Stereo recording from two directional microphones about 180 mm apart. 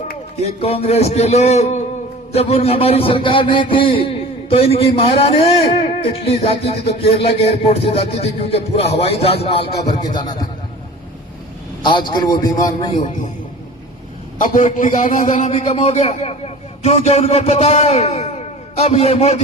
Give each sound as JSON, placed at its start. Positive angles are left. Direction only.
{"t": 0.4, "sound": "a man's voice", "side_deg": 35}
{"t": 11.8, "sound": "a man's voice", "side_deg": 25}
{"t": 14.3, "sound": "a man's voice", "side_deg": 45}